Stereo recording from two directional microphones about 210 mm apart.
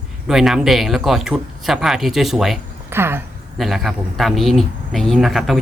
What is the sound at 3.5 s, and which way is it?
Speech, centre (ahead or behind).